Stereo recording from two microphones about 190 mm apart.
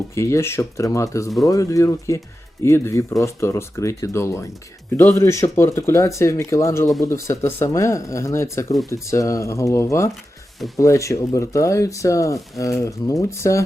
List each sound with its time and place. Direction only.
0.1 s speech: 15° left (ahead or behind)